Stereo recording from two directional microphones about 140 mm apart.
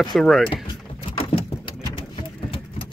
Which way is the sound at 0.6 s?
40° left (ahead or behind).